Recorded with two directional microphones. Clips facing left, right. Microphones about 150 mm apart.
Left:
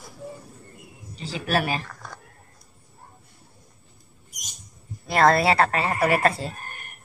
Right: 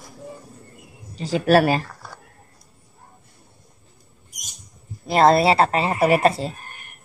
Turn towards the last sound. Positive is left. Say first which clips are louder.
# right 4 dB
turn(degrees=-20)  # may be behind; listen again after turning